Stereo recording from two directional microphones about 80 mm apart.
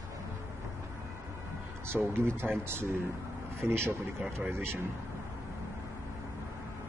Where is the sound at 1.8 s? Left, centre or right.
Right.